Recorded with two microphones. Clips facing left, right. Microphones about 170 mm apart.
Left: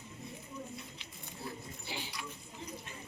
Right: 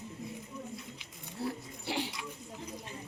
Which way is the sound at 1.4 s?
75° right (ahead or behind).